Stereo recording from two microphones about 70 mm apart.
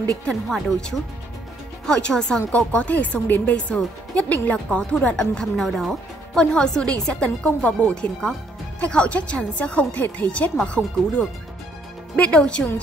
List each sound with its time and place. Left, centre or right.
0.3 s speech: centre